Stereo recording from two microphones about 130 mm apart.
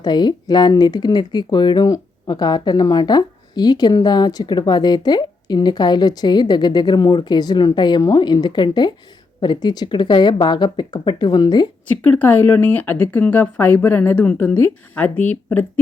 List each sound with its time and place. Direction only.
0.0 s speech: 35° left (ahead or behind)
11.9 s speech: 10° left (ahead or behind)